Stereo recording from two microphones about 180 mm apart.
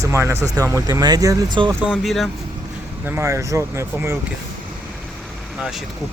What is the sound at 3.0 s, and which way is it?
Speech, 15° right (ahead or behind).